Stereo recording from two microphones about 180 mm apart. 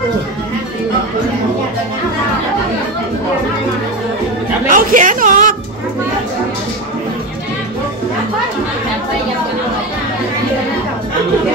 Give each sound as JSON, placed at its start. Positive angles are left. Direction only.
{"t": 4.6, "sound": "a woman's voice", "side_deg": -45}